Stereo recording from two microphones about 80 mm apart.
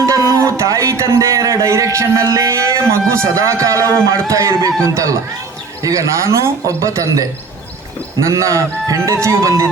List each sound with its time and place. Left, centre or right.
0.0 s a man's voice: right
8.3 s a man's voice: right